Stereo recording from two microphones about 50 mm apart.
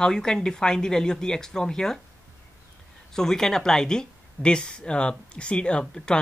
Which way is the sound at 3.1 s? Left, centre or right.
Centre.